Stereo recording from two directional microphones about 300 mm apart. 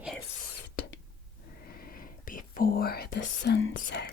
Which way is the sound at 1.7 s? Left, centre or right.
Left.